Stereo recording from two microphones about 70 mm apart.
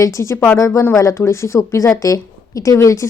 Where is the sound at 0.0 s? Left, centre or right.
Left.